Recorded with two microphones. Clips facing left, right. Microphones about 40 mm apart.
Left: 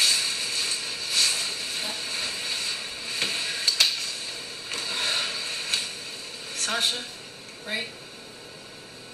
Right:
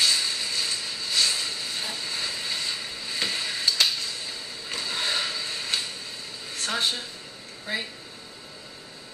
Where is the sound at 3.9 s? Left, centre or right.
Left.